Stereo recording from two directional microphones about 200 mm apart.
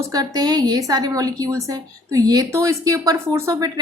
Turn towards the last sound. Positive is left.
turn(degrees=-15)  # may be behind; listen again after turning